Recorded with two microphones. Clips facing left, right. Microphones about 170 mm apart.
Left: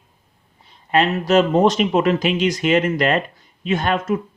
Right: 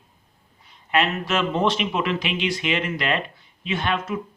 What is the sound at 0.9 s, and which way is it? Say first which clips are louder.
A man's voice: left 7 dB; 35° left (ahead or behind).